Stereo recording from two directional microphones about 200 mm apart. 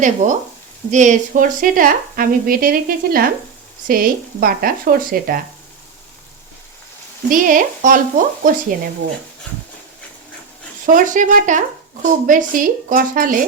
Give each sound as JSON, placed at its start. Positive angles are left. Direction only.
{"t": 0.0, "sound": "frying", "side_deg": -40}
{"t": 0.9, "sound": "speech", "side_deg": -40}
{"t": 7.3, "sound": "frying", "side_deg": -40}
{"t": 8.7, "sound": "speech", "side_deg": -45}
{"t": 10.8, "sound": "frying", "side_deg": -40}
{"t": 12.0, "sound": "speech", "side_deg": -40}